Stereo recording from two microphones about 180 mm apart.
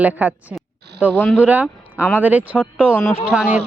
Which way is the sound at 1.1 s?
10° left (ahead or behind).